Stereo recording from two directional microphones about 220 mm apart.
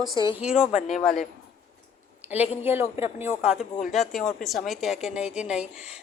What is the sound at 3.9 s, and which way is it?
Speech, centre (ahead or behind).